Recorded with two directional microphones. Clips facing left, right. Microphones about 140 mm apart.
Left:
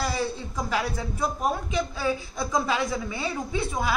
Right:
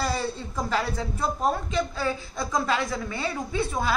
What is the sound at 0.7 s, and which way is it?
A woman's voice, 10° left (ahead or behind).